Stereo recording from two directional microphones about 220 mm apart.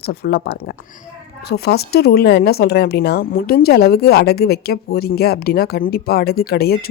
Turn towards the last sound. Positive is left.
turn(degrees=45)  # may be behind; listen again after turning